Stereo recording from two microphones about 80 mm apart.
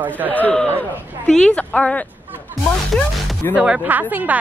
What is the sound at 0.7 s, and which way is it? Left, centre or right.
A woman's voice, centre.